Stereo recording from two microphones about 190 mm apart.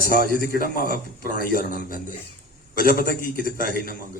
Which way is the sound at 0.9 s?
50° left (ahead or behind).